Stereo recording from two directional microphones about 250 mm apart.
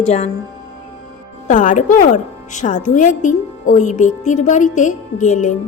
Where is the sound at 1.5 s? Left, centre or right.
Left.